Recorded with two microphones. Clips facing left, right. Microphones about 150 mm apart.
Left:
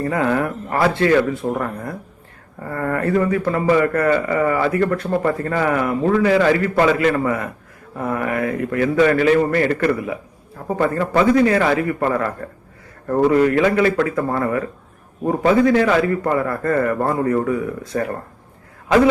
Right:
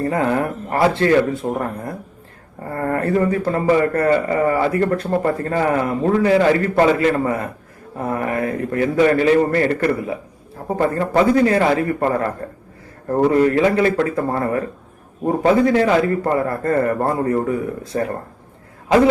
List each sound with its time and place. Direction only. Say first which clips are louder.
0.0 s a man's voice: even; 30° right (ahead or behind)
13.3 s a man's voice: right 1 dB; 35° right (ahead or behind)